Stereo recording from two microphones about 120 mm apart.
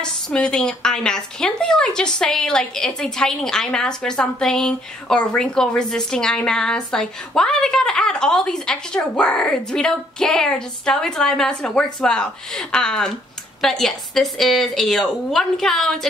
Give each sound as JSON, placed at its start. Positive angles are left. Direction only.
{"t": 0.0, "sound": "a woman's voice", "side_deg": 5}